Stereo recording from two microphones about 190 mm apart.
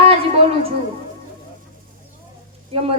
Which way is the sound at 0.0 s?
30° right (ahead or behind).